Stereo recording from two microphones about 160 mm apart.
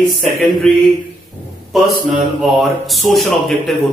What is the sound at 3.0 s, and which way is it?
Speech, centre (ahead or behind).